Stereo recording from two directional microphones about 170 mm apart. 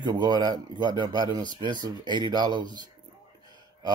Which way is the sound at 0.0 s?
25° right (ahead or behind).